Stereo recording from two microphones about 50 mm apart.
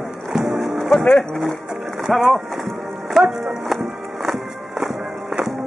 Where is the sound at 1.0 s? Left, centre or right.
Left.